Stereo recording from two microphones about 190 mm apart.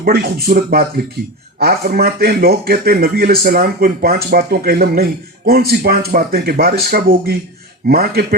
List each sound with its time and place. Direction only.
0.0 s a man's voice: 55° right (ahead or behind)